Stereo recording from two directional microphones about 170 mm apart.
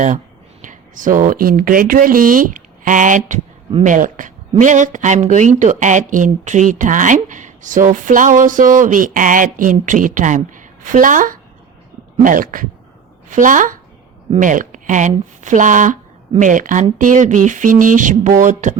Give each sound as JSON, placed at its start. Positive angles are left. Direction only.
{"t": 0.6, "sound": "a woman's voice", "side_deg": -50}